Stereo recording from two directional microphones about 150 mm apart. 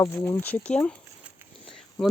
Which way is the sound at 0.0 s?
15° left (ahead or behind).